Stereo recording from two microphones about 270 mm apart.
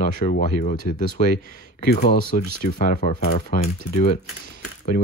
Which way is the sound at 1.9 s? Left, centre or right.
Left.